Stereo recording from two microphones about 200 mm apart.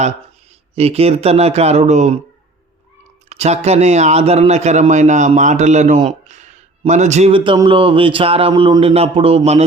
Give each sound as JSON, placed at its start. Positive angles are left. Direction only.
{"t": 0.8, "sound": "a man's voice", "side_deg": -30}
{"t": 3.2, "sound": "a man's voice", "side_deg": -35}